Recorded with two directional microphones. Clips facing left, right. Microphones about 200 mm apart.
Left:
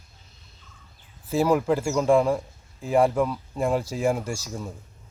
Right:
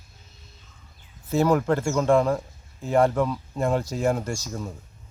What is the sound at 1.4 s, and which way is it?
A man's voice, 5° left (ahead or behind).